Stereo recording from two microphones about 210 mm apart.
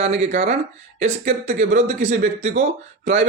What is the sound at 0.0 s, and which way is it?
Speech, 30° right (ahead or behind).